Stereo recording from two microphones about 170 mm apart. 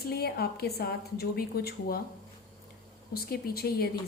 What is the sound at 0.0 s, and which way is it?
A woman's voice, 70° left (ahead or behind).